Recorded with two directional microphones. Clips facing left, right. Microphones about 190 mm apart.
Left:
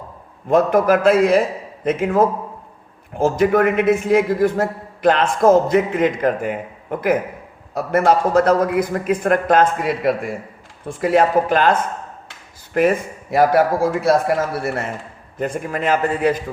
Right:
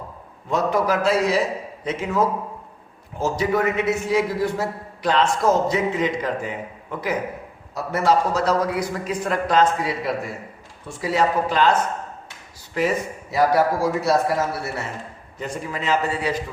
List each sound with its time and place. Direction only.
0.4 s a man's voice: 50° left (ahead or behind)
7.7 s a man's voice: 55° left (ahead or behind)